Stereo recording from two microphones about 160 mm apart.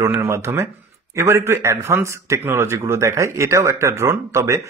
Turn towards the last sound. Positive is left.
turn(degrees=-20)  # may be behind; listen again after turning